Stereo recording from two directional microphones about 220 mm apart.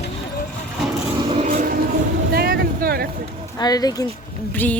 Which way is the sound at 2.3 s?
45° right (ahead or behind).